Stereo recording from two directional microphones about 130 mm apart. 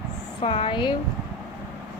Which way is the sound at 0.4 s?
45° left (ahead or behind).